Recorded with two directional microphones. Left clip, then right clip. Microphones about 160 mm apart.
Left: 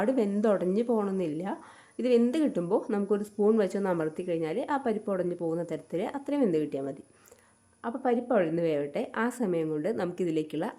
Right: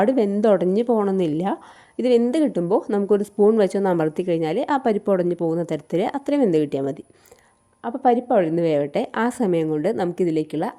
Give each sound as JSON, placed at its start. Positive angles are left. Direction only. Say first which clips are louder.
{"t": 0.0, "sound": "speech", "louder": "right 8 dB", "side_deg": -40}
{"t": 2.0, "sound": "speech", "louder": "right 7 dB", "side_deg": -40}